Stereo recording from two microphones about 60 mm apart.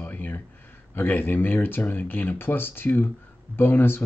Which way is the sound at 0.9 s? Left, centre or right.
Left.